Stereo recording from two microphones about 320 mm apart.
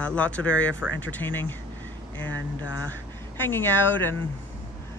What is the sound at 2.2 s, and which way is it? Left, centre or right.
Speech, left.